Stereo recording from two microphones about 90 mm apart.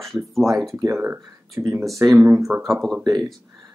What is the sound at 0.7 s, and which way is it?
Speech, 35° right (ahead or behind).